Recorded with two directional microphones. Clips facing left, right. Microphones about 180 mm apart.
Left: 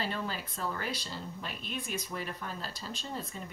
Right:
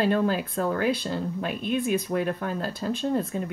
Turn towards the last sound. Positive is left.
turn(degrees=-60)  # may be behind; listen again after turning